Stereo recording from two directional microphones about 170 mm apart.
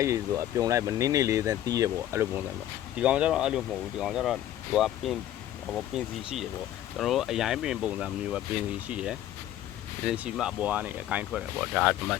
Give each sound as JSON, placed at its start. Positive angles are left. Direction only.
{"t": 0.0, "sound": "speech", "side_deg": -20}
{"t": 2.9, "sound": "speech", "side_deg": -5}